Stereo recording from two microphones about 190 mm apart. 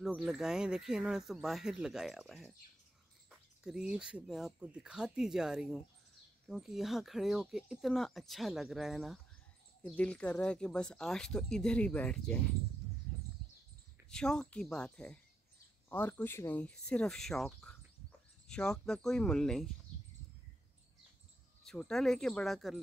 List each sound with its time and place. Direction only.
0.0 s speech: centre (ahead or behind)
13.4 s a sound: centre (ahead or behind)
14.1 s speech: 5° left (ahead or behind)
21.6 s speech: 5° left (ahead or behind)